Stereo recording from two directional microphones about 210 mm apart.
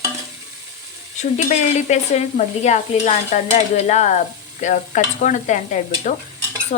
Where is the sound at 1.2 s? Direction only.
35° left (ahead or behind).